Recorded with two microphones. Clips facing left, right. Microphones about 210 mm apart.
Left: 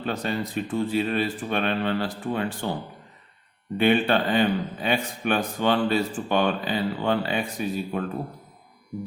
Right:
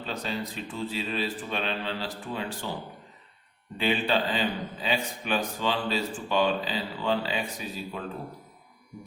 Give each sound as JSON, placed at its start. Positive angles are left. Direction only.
{"t": 0.0, "sound": "a man's voice", "side_deg": 55}
{"t": 3.8, "sound": "a man's voice", "side_deg": 60}